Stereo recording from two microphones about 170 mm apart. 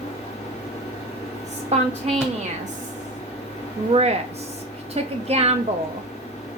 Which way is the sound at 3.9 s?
35° right (ahead or behind).